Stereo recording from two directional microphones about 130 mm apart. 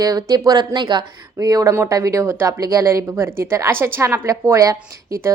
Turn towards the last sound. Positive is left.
turn(degrees=-25)  # may be behind; listen again after turning